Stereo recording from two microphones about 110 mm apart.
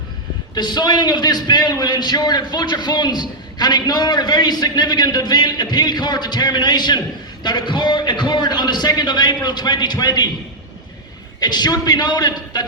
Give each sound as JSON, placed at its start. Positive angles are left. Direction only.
{"t": 0.5, "sound": "a man's voice", "side_deg": 40}
{"t": 11.3, "sound": "a man's voice", "side_deg": 40}